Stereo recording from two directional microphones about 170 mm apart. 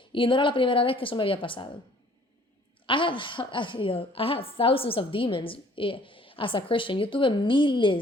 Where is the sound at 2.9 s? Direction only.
30° left (ahead or behind).